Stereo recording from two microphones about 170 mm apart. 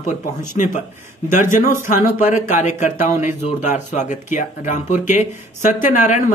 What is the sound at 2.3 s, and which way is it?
Speech, 45° left (ahead or behind).